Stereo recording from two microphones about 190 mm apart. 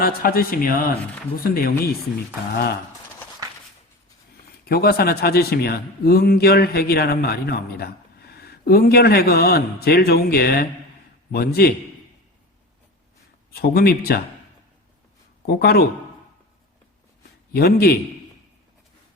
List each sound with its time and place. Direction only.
0.0 s a man's voice: 50° left (ahead or behind)
4.6 s a man's voice: 55° left (ahead or behind)
13.5 s a man's voice: 55° left (ahead or behind)
15.4 s a man's voice: 55° left (ahead or behind)
17.5 s a man's voice: 55° left (ahead or behind)